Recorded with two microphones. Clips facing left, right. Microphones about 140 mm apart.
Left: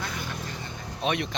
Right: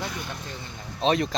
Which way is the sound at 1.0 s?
30° right (ahead or behind).